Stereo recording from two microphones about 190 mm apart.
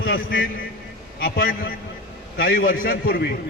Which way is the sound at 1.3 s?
50° left (ahead or behind).